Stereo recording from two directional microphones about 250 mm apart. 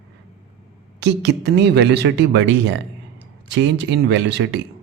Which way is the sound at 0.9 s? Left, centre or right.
Right.